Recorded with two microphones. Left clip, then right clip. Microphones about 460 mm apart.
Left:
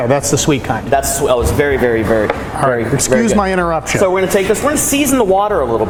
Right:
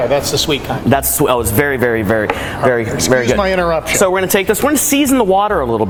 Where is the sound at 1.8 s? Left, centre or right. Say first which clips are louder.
Left 1 dB; right.